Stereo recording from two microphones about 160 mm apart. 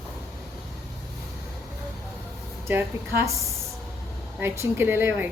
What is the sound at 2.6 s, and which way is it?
Speech, 15° right (ahead or behind).